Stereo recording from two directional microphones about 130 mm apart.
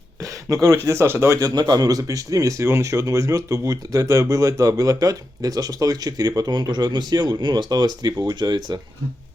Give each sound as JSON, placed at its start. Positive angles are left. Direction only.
{"t": 0.2, "sound": "speech", "side_deg": -25}
{"t": 1.4, "sound": "speech", "side_deg": -30}